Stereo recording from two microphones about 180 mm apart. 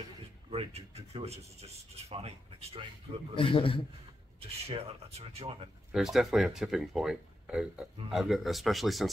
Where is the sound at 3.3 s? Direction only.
30° left (ahead or behind).